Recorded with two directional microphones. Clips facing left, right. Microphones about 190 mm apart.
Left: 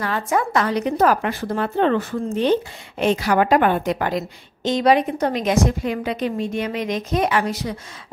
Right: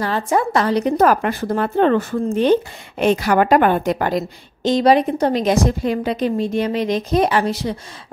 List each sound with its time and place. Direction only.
0.0 s a woman's voice: 30° right (ahead or behind)